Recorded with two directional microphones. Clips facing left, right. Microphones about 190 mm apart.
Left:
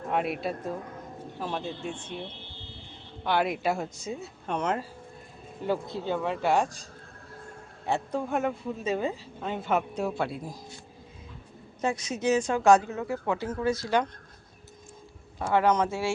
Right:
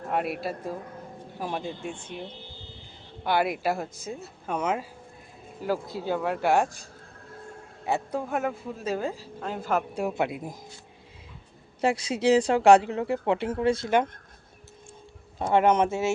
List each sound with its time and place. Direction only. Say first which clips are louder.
0.1 s speech: even; centre (ahead or behind)
7.9 s speech: even; 5° right (ahead or behind)
9.9 s speech: right 2 dB; 15° right (ahead or behind)
11.8 s speech: right 4 dB; 30° right (ahead or behind)
15.4 s speech: right 3 dB; 25° right (ahead or behind)